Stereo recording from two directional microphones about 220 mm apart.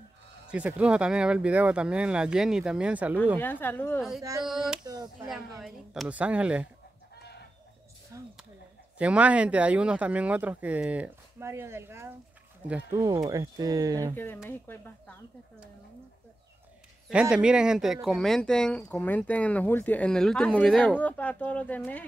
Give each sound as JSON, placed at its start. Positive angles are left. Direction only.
{"t": 0.5, "sound": "speech", "side_deg": -5}
{"t": 3.3, "sound": "speech", "side_deg": 10}
{"t": 4.8, "sound": "speech", "side_deg": -20}
{"t": 5.3, "sound": "speech", "side_deg": 0}
{"t": 8.1, "sound": "speech", "side_deg": -15}
{"t": 14.1, "sound": "speech", "side_deg": 10}
{"t": 17.1, "sound": "speech", "side_deg": -5}